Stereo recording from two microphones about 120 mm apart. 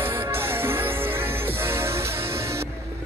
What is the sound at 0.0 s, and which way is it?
Music, 20° right (ahead or behind).